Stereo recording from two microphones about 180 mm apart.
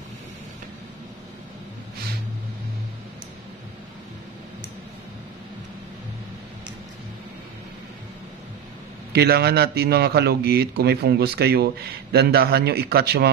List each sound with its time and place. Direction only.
9.1 s a man's voice: 65° right (ahead or behind)